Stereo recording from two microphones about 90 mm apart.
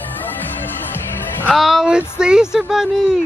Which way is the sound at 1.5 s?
Centre (ahead or behind).